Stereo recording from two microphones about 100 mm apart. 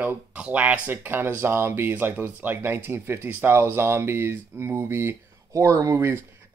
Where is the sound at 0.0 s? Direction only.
15° right (ahead or behind).